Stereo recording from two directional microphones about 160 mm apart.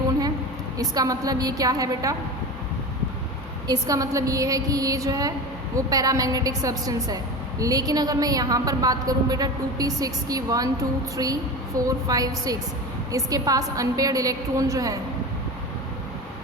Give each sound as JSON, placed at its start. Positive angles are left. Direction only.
{"t": 0.8, "sound": "a woman's voice", "side_deg": -20}
{"t": 3.7, "sound": "a woman's voice", "side_deg": -20}